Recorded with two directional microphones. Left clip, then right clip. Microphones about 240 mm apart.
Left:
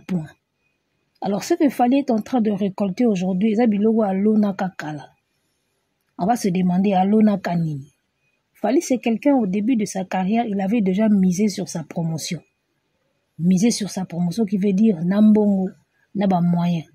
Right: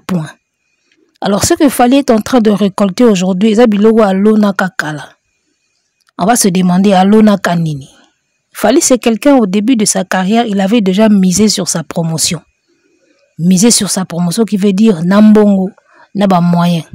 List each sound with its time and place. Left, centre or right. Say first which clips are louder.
0.0 s speech: right 11 dB; right
6.1 s speech: right 10 dB; right
13.5 s speech: right 11 dB; right